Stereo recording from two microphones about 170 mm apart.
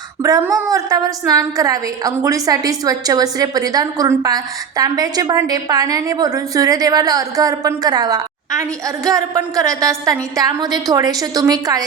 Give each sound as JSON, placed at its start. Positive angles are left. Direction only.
{"t": 0.2, "sound": "a woman's voice", "side_deg": -20}